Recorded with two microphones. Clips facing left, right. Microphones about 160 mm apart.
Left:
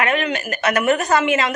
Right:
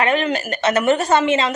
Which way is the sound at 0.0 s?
35° right (ahead or behind).